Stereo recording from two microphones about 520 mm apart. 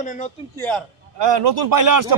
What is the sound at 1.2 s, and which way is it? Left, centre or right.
Speech, right.